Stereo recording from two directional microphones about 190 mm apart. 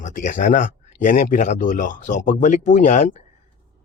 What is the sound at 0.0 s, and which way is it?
Speech, 40° left (ahead or behind).